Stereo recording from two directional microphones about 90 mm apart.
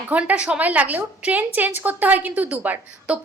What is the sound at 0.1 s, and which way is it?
A woman's voice, 15° right (ahead or behind).